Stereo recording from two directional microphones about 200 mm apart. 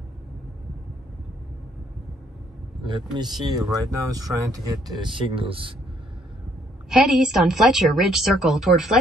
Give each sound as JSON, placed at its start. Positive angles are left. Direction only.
{"t": 2.8, "sound": "speech", "side_deg": -20}
{"t": 6.9, "sound": "a woman's voice", "side_deg": 0}